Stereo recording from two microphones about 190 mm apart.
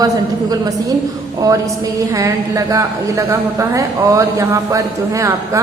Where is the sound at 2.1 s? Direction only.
15° right (ahead or behind).